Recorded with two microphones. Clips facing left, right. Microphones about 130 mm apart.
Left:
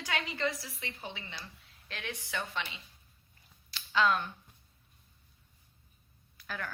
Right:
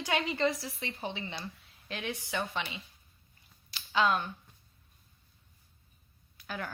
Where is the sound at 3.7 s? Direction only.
15° right (ahead or behind).